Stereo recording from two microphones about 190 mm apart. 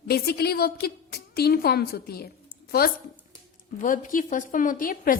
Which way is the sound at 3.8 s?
45° left (ahead or behind).